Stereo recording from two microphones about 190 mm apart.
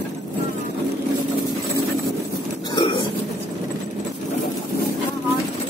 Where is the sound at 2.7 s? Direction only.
25° left (ahead or behind).